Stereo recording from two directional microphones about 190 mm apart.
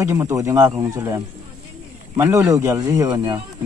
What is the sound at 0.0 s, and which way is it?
Speech, 15° right (ahead or behind).